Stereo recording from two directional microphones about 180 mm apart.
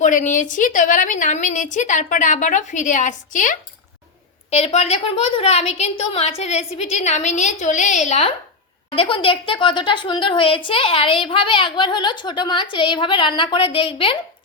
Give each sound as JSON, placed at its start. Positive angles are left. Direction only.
{"t": 0.0, "sound": "a woman's voice", "side_deg": 45}
{"t": 9.0, "sound": "a woman's voice", "side_deg": 30}